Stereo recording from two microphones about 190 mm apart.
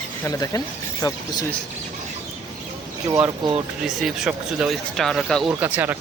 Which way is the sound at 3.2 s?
25° right (ahead or behind).